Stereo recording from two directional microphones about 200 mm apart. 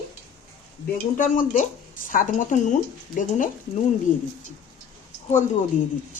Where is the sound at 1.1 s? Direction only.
40° left (ahead or behind).